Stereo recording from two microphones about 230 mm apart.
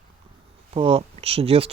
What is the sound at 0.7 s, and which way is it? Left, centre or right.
Speech, right.